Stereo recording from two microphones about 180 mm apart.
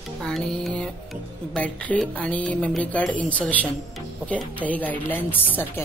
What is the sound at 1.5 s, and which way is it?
Speech, 5° left (ahead or behind).